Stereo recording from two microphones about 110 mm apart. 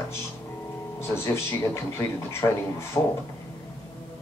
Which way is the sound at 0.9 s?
25° left (ahead or behind).